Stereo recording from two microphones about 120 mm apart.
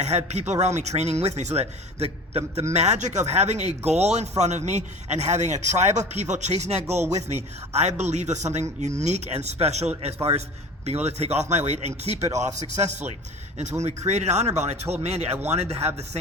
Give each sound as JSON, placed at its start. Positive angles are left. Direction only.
{"t": 0.0, "sound": "speech", "side_deg": -65}